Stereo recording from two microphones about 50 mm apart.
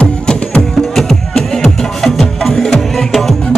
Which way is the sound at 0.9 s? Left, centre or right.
Centre.